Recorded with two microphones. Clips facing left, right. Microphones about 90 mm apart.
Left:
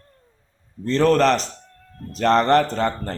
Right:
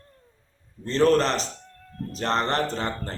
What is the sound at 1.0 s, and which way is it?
Speech, 45° left (ahead or behind).